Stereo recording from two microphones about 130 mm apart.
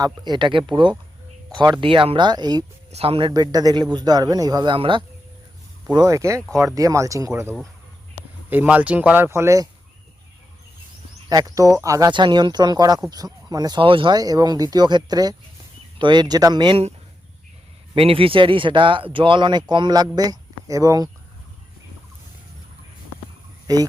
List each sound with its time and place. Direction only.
0.0 s speech: 35° right (ahead or behind)
2.9 s speech: 50° right (ahead or behind)
5.9 s speech: 25° right (ahead or behind)
8.4 s speech: 10° right (ahead or behind)
11.3 s speech: 30° right (ahead or behind)
12.1 s speech: 35° right (ahead or behind)
17.9 s speech: 45° right (ahead or behind); by 21.1 s 25° right (ahead or behind)